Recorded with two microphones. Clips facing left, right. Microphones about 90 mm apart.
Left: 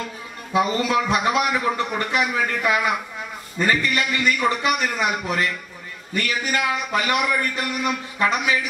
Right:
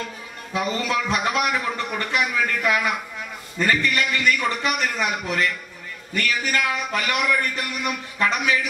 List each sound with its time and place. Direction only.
0.6 s a man's voice: 20° left (ahead or behind)
6.1 s a man's voice: 20° left (ahead or behind)